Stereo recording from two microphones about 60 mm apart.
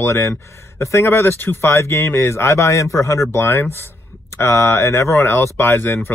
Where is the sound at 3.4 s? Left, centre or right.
Left.